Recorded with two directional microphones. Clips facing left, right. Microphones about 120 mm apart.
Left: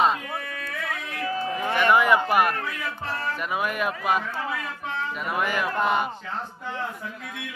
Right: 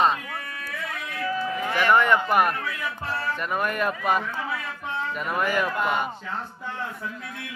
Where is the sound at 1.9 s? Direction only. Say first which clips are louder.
Even; 5° left (ahead or behind).